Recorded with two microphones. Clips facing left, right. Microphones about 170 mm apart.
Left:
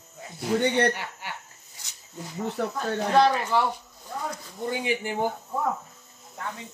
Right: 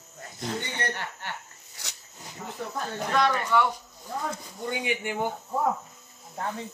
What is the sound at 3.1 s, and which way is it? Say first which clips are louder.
Speech: left 2 dB; 30° left (ahead or behind).